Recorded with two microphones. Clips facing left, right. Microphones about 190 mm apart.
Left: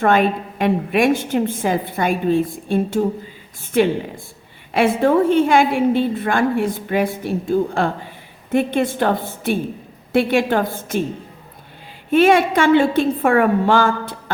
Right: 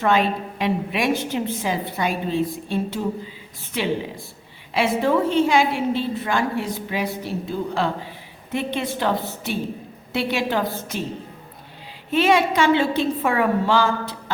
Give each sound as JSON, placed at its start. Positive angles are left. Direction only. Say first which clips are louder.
{"t": 0.0, "sound": "a woman's voice", "louder": "left 4 dB", "side_deg": 50}
{"t": 12.1, "sound": "a woman's voice", "louder": "left 5 dB", "side_deg": 50}